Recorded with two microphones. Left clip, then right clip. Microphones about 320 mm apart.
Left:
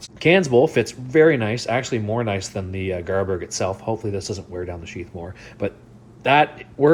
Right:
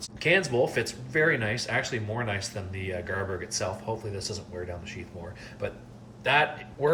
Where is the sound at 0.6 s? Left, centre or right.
Centre.